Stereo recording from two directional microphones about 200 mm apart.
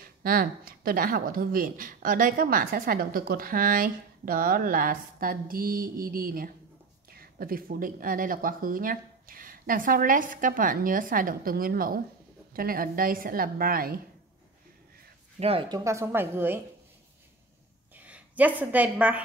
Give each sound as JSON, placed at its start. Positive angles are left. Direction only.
{"t": 0.0, "sound": "speech", "side_deg": -45}
{"t": 15.3, "sound": "a woman's voice", "side_deg": -30}
{"t": 15.7, "sound": "a woman's voice", "side_deg": -15}
{"t": 17.9, "sound": "a woman's voice", "side_deg": -5}